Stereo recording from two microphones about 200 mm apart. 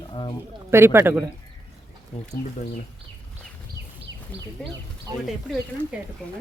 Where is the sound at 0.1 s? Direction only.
25° left (ahead or behind).